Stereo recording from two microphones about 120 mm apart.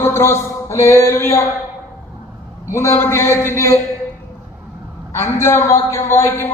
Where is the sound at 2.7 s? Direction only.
25° left (ahead or behind).